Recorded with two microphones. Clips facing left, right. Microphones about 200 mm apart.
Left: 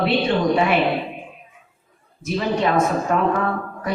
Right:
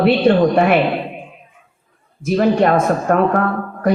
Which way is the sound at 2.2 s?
55° right (ahead or behind).